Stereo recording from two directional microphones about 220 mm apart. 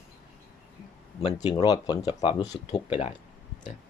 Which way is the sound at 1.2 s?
25° left (ahead or behind).